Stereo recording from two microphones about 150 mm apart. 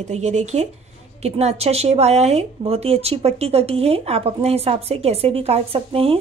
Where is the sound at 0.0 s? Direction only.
50° right (ahead or behind).